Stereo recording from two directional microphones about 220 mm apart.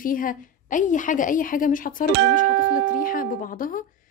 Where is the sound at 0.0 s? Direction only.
40° left (ahead or behind).